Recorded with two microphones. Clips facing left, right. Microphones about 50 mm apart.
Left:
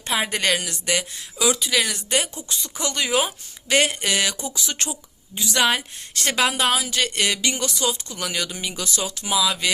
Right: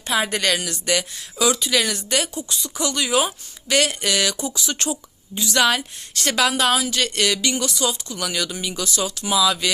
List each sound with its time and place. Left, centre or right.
0.1 s a woman's voice: centre
6.5 s speech: centre